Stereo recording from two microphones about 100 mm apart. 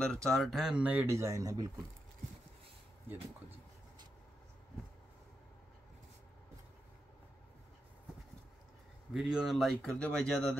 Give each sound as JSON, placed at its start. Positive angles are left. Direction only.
{"t": 0.0, "sound": "speech", "side_deg": 5}
{"t": 1.0, "sound": "speech", "side_deg": -30}
{"t": 9.1, "sound": "speech", "side_deg": -5}
{"t": 9.8, "sound": "speech", "side_deg": 10}